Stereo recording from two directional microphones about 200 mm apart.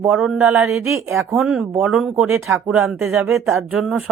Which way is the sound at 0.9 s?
15° right (ahead or behind).